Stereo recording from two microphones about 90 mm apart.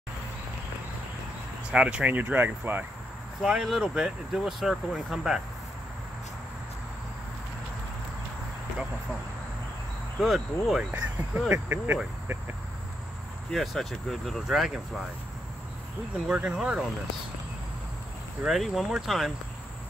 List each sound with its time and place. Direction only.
1.7 s speech: 10° right (ahead or behind)
3.4 s speech: 5° right (ahead or behind)
10.2 s speech: centre (ahead or behind)
10.9 s speech: 20° right (ahead or behind)
13.5 s speech: 5° left (ahead or behind)
16.3 s speech: 10° right (ahead or behind)
18.4 s speech: centre (ahead or behind)